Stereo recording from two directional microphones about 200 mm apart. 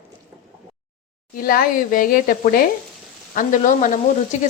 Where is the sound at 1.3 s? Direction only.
45° left (ahead or behind).